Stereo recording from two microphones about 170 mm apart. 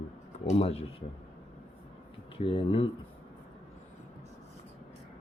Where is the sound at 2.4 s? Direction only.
30° left (ahead or behind).